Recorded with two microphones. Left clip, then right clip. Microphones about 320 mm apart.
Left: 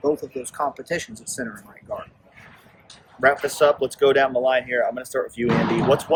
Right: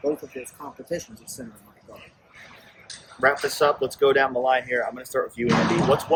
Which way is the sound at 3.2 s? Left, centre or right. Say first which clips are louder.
Left 3 dB; centre.